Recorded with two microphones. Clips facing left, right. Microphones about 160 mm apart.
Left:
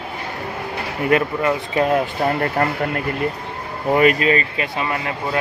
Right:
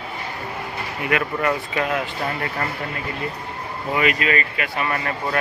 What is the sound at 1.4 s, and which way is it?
Speech, 30° left (ahead or behind).